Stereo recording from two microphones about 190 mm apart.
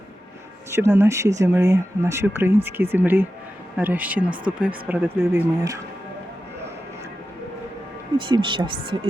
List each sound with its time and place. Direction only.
0.7 s speech: 15° right (ahead or behind)
8.2 s speech: 25° right (ahead or behind)